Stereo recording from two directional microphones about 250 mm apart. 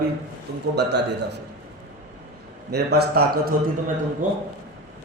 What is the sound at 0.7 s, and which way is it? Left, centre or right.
Speech, right.